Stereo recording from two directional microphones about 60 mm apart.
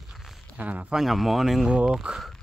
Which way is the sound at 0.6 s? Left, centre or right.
Right.